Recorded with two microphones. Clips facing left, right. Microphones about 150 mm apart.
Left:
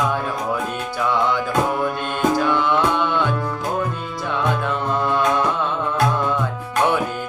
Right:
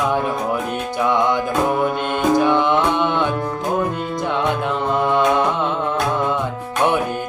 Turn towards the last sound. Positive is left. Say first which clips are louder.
# right 3 dB
turn(degrees=-20)  # may be behind; listen again after turning